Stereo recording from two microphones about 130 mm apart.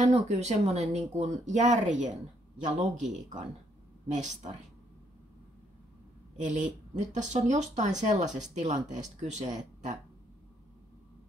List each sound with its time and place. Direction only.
0.0 s speech: 60° right (ahead or behind)
6.3 s speech: 70° right (ahead or behind)